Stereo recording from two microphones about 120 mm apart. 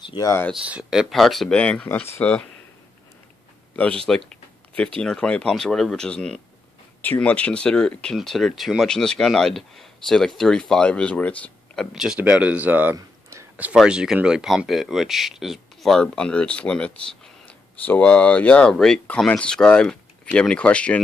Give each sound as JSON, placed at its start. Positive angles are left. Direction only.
{"t": 0.2, "sound": "speech", "side_deg": 20}
{"t": 0.7, "sound": "speech", "side_deg": -5}
{"t": 4.0, "sound": "speech", "side_deg": 5}
{"t": 12.9, "sound": "a sound", "side_deg": -25}
{"t": 13.7, "sound": "speech", "side_deg": -5}